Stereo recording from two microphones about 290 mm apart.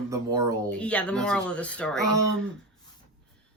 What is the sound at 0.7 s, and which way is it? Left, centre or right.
Speech, centre.